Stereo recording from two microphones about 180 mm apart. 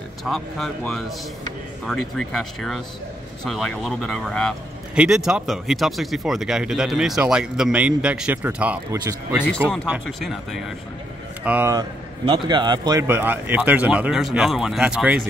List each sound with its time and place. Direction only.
0.2 s speech: centre (ahead or behind)
8.9 s speech: 20° right (ahead or behind)
10.0 s speech: centre (ahead or behind)
12.3 s speech: 25° right (ahead or behind); by 15.2 s 5° right (ahead or behind)